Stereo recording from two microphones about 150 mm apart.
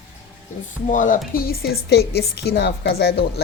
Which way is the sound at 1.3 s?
85° left.